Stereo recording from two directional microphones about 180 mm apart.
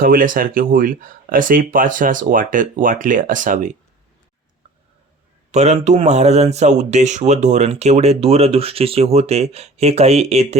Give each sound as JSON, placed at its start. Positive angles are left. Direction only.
{"t": 0.0, "sound": "speech", "side_deg": -50}
{"t": 5.5, "sound": "speech", "side_deg": -40}